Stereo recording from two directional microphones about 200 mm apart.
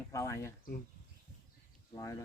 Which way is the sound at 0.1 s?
15° left (ahead or behind).